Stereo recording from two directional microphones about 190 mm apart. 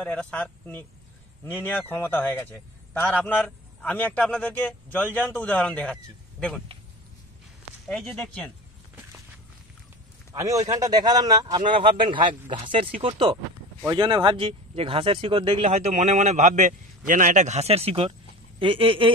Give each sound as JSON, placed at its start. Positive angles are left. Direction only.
{"t": 0.0, "sound": "a man's voice", "side_deg": 5}
{"t": 7.9, "sound": "speech", "side_deg": 0}
{"t": 10.3, "sound": "speech", "side_deg": -15}